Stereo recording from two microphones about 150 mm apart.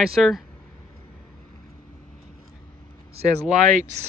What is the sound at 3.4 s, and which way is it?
Speech, 5° right (ahead or behind).